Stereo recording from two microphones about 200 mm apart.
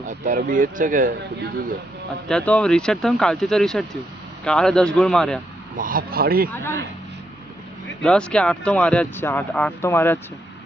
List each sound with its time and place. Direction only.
0.1 s speech: 40° right (ahead or behind)
2.2 s speech: 5° left (ahead or behind)
5.7 s speech: 45° right (ahead or behind)
6.5 s speech: 10° left (ahead or behind)
8.0 s speech: 5° left (ahead or behind)